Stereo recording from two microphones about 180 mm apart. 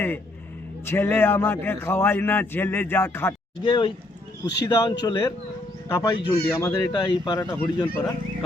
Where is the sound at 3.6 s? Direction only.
30° left (ahead or behind).